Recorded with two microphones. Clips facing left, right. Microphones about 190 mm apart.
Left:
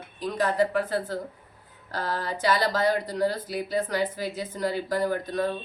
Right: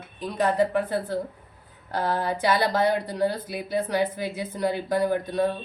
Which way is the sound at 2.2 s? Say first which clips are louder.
Even; 55° right (ahead or behind).